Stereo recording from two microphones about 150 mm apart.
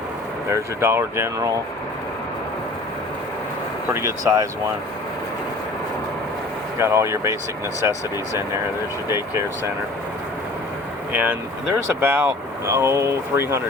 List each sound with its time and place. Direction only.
0.5 s speech: 15° right (ahead or behind)
3.9 s speech: 20° right (ahead or behind)
6.7 s speech: 20° right (ahead or behind)
11.1 s speech: 10° right (ahead or behind)